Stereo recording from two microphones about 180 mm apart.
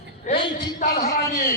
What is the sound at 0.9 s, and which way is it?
Speech, 60° left (ahead or behind).